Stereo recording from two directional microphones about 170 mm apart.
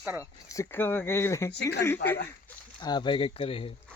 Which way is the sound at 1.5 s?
85° left.